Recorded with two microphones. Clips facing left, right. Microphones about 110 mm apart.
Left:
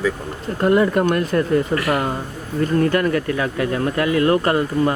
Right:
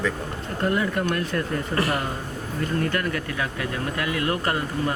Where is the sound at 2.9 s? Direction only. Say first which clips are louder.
Left 8 dB; 40° left (ahead or behind).